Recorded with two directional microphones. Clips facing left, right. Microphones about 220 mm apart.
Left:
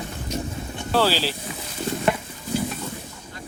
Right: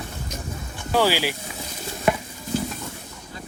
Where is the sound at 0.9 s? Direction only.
15° right (ahead or behind).